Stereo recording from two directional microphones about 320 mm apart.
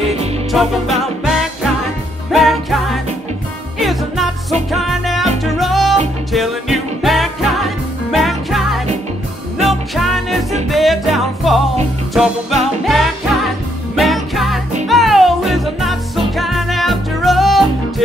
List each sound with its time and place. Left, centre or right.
0.5 s music: centre